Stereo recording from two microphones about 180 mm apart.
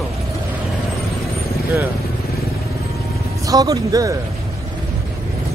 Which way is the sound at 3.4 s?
20° right (ahead or behind).